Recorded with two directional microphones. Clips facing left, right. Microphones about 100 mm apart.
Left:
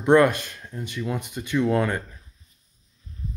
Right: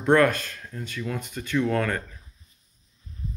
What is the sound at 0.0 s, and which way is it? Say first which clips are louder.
Speech: left 2 dB; 20° left (ahead or behind).